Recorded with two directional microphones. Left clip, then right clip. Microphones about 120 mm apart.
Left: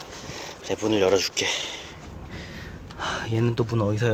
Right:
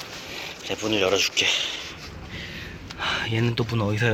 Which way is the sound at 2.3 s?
45° left (ahead or behind).